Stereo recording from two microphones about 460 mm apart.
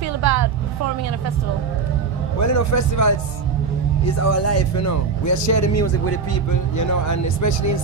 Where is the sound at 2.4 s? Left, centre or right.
Left.